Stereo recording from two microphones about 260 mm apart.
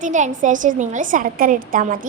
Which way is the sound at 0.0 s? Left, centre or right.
Right.